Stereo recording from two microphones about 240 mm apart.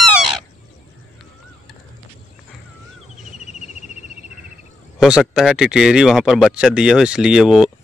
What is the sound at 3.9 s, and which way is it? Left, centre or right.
Cricket, left.